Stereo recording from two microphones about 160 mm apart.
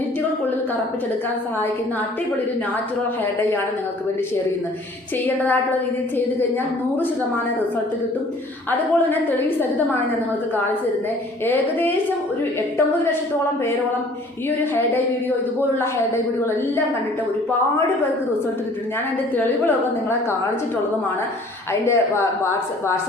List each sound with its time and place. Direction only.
8.7 s a woman's voice: 10° left (ahead or behind)
11.4 s a woman's voice: 10° left (ahead or behind)
14.6 s a woman's voice: 10° left (ahead or behind)
19.4 s a woman's voice: 15° left (ahead or behind)
21.7 s a woman's voice: 15° left (ahead or behind)